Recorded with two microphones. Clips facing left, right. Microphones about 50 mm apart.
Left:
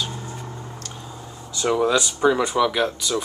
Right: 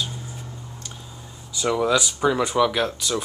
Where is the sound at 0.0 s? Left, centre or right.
Left.